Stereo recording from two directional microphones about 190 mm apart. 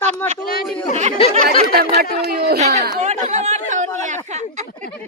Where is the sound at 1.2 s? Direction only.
30° left (ahead or behind).